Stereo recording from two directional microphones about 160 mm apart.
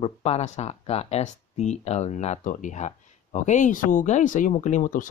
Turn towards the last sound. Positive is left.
turn(degrees=55)  # may be behind; listen again after turning